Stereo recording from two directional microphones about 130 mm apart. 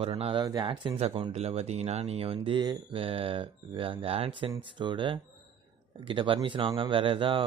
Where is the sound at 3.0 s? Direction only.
45° right (ahead or behind).